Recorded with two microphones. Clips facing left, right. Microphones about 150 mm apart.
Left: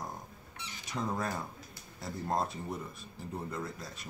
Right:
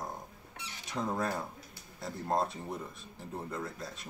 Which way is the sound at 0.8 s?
Centre (ahead or behind).